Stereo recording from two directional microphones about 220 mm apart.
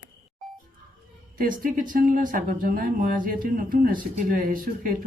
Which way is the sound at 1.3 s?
40° right (ahead or behind).